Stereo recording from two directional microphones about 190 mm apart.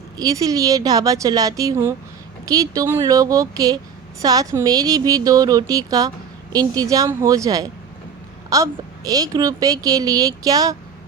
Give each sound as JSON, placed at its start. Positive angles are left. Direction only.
{"t": 0.2, "sound": "a woman's voice", "side_deg": -20}